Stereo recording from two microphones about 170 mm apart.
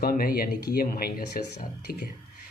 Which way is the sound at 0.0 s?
60° left (ahead or behind).